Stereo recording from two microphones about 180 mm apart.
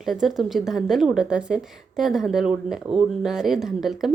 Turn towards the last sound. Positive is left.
turn(degrees=0)  # may be behind; listen again after turning